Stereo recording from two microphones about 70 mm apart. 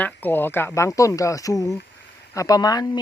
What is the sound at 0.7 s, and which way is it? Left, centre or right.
Speech, left.